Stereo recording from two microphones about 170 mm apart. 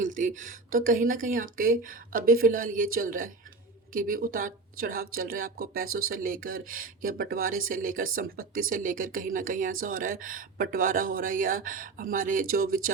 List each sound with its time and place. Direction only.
0.0 s a woman's voice: 45° right (ahead or behind)